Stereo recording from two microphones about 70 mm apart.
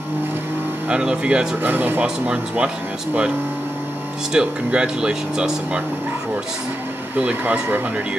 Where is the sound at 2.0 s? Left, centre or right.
Centre.